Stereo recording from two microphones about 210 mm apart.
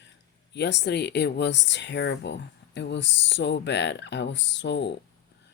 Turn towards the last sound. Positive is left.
turn(degrees=55)  # may be behind; listen again after turning